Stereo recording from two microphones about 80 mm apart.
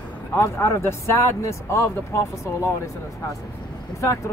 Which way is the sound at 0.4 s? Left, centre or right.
Left.